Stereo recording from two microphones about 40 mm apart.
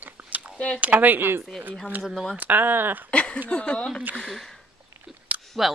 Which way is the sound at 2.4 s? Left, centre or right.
Right.